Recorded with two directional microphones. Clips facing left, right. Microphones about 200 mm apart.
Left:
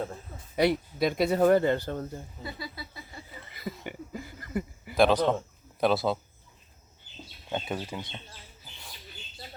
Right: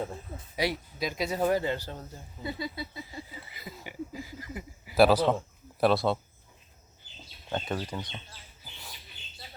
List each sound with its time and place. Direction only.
0.5 s speech: 55° left (ahead or behind)
2.4 s speech: 20° right (ahead or behind)
3.5 s a sound: 55° left (ahead or behind)
4.9 s speech: 5° right (ahead or behind)
7.5 s speech: 5° left (ahead or behind)